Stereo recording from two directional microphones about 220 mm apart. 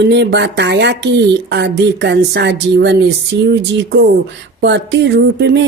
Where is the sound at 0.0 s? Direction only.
50° right (ahead or behind).